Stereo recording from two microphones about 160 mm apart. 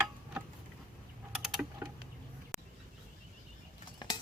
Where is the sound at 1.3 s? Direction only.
Centre (ahead or behind).